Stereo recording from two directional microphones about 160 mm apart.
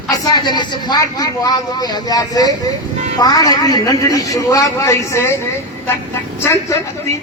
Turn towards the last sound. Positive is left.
turn(degrees=15)  # may be behind; listen again after turning